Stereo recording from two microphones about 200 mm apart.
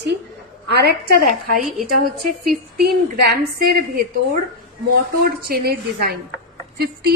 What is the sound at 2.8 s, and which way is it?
Speech, 50° right (ahead or behind).